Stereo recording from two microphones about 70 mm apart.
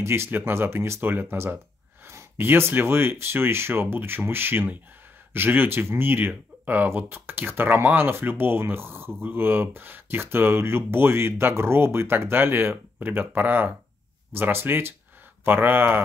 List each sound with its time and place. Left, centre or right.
0.0 s speech: right